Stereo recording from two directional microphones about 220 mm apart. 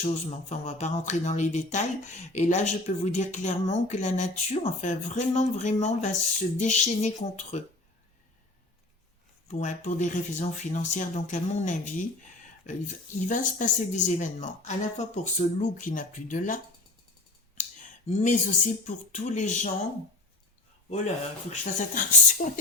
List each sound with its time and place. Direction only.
0.0 s speech: 30° left (ahead or behind)
9.5 s speech: 35° left (ahead or behind)
17.6 s speech: 35° left (ahead or behind)
21.5 s speech: 35° left (ahead or behind)